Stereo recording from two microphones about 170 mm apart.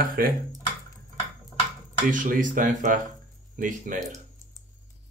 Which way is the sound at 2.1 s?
50° right (ahead or behind).